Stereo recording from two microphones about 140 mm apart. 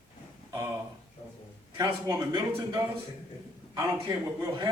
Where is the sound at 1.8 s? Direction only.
25° right (ahead or behind).